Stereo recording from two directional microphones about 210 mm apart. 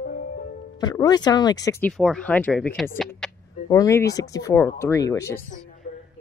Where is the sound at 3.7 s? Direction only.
15° left (ahead or behind).